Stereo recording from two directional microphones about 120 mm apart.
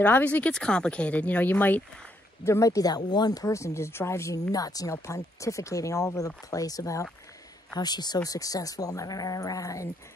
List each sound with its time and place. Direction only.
0.0 s speech: 15° left (ahead or behind)
2.4 s speech: 25° left (ahead or behind)